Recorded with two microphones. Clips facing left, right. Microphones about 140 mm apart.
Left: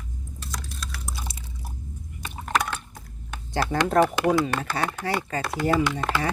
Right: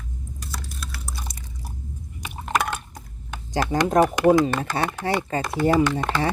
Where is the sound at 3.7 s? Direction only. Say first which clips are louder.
Right 2 dB; 15° right (ahead or behind).